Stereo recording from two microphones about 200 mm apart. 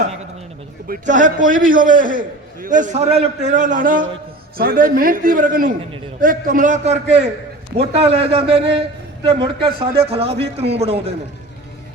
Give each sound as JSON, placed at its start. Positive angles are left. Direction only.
{"t": 0.9, "sound": "a man's voice", "side_deg": -40}